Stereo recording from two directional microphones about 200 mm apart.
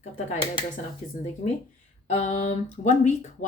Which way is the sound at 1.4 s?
35° left (ahead or behind).